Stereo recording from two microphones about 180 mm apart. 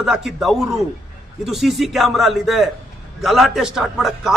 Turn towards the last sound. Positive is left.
turn(degrees=0)  # may be behind; listen again after turning